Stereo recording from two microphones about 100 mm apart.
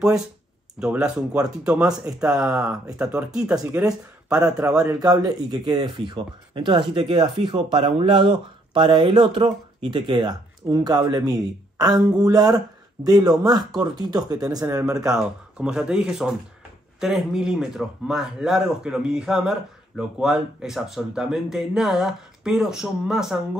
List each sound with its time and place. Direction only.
0.7 s speech: 5° right (ahead or behind)
4.8 s speech: 40° right (ahead or behind)
6.1 s speech: 50° right (ahead or behind); by 15.0 s 35° right (ahead or behind)
15.0 s speech: 5° right (ahead or behind)